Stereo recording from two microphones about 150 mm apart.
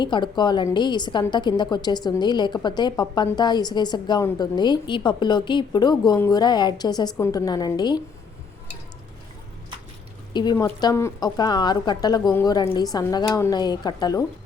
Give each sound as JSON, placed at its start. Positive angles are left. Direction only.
{"t": 0.0, "sound": "a woman's voice", "side_deg": 30}
{"t": 10.3, "sound": "a woman's voice", "side_deg": 30}